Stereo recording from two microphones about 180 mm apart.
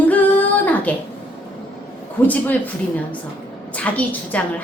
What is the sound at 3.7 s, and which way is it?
Speech, 5° left (ahead or behind).